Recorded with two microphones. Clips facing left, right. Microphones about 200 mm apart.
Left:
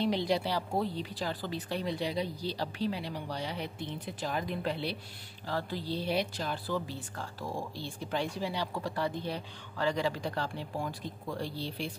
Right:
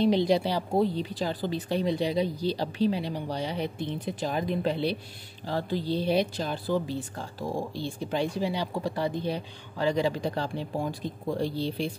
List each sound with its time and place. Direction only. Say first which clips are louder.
0.0 s speech: right 7 dB; 20° right (ahead or behind)